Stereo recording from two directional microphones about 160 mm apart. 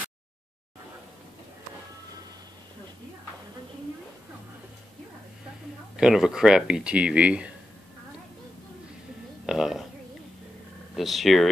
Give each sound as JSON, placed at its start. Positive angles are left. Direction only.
{"t": 5.9, "sound": "speech", "side_deg": -5}
{"t": 9.5, "sound": "a sound", "side_deg": -5}
{"t": 11.0, "sound": "speech", "side_deg": 0}